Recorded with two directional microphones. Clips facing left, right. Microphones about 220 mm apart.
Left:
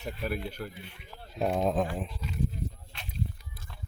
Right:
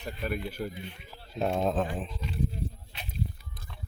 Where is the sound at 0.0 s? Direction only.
5° left (ahead or behind).